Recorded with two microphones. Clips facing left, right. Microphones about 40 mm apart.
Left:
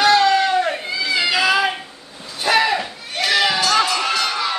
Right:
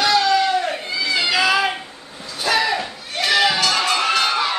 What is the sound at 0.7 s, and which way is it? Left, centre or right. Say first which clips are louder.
Cat: left 1 dB; centre.